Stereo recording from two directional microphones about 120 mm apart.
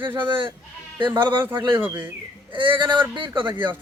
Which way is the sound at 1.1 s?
20° right (ahead or behind).